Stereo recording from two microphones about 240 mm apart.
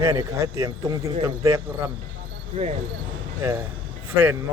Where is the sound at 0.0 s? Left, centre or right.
Centre.